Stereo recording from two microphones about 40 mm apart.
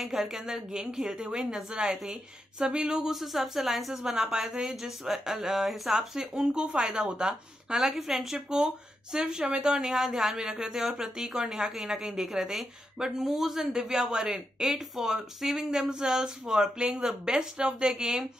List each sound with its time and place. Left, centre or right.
0.0 s a woman's voice: centre
3.1 s a woman's voice: centre